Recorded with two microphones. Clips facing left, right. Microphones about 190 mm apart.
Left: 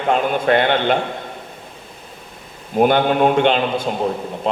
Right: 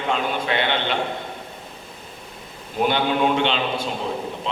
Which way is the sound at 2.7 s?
50° left (ahead or behind).